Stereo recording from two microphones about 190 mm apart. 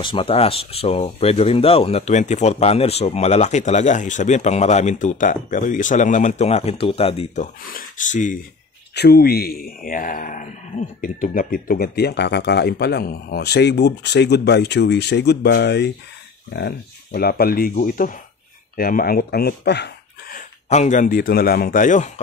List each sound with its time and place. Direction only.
0.0 s speech: 25° left (ahead or behind)
7.7 s speech: 40° left (ahead or behind)
8.9 s speech: 55° left (ahead or behind)
20.3 s speech: 40° left (ahead or behind)